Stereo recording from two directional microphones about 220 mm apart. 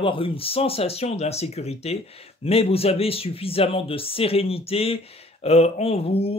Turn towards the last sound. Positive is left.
turn(degrees=25)  # may be behind; listen again after turning